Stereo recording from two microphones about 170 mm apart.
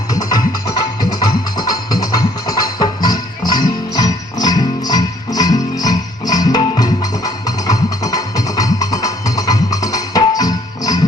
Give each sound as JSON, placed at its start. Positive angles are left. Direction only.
{"t": 0.1, "sound": "music", "side_deg": 20}